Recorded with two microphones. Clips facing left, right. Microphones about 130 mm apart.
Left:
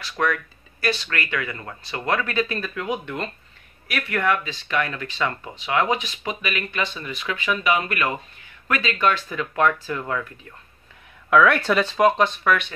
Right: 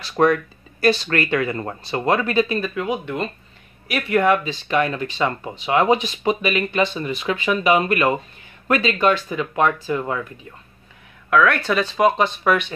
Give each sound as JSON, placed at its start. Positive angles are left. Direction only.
{"t": 0.0, "sound": "speech", "side_deg": -30}
{"t": 3.8, "sound": "speech", "side_deg": -20}
{"t": 11.2, "sound": "speech", "side_deg": 5}
{"t": 12.4, "sound": "speech", "side_deg": -20}